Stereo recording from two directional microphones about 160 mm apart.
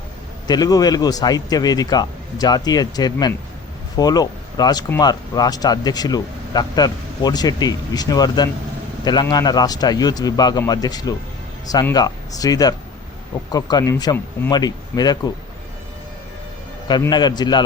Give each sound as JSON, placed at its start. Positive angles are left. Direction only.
{"t": 0.4, "sound": "speech", "side_deg": 25}
{"t": 17.1, "sound": "speech", "side_deg": 25}